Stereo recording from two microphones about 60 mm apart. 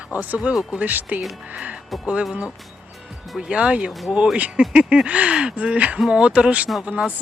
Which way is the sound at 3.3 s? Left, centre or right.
Centre.